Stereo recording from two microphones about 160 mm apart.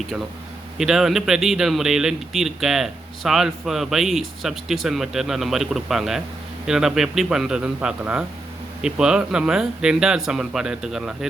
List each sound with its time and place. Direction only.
0.8 s speech: centre (ahead or behind)